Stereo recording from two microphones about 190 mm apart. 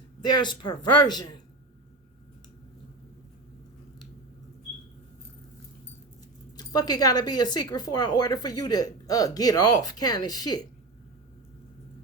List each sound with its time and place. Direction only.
0.2 s speech: 25° left (ahead or behind)
6.6 s speech: 20° left (ahead or behind)